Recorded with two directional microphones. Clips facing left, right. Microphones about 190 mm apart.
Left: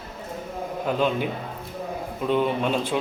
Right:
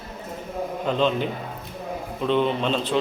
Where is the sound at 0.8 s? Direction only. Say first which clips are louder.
Right 1 dB; 10° left (ahead or behind).